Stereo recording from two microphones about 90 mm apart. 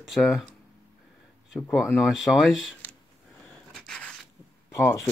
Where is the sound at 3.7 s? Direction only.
5° left (ahead or behind).